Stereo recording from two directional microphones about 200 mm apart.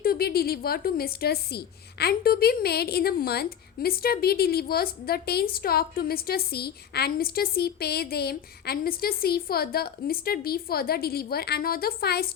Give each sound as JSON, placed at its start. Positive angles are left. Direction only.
{"t": 0.0, "sound": "a woman's voice", "side_deg": 50}